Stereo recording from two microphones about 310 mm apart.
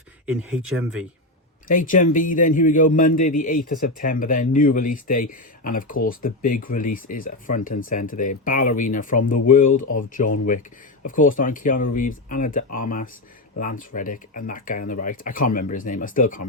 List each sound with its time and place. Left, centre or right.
0.3 s speech: centre
1.6 s a man's voice: left